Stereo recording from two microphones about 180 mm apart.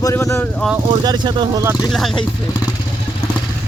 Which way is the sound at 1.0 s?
25° right (ahead or behind).